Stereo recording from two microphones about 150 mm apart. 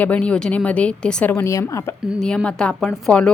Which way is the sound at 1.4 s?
20° left (ahead or behind).